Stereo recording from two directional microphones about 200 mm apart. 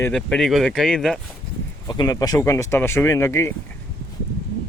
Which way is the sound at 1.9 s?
20° left (ahead or behind).